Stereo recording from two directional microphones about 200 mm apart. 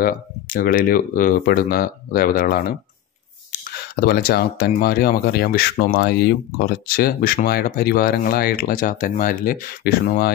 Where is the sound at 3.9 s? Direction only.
50° left (ahead or behind).